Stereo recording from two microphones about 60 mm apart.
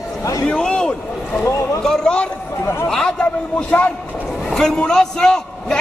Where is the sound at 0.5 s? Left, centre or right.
Centre.